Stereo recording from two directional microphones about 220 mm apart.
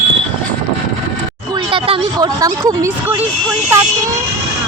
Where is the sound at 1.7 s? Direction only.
25° right (ahead or behind).